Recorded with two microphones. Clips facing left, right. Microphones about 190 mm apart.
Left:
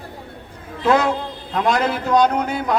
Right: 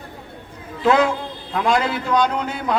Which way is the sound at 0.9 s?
40° left (ahead or behind).